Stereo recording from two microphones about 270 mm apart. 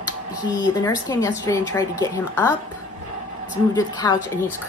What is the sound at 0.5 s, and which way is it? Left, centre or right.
A woman's voice, centre.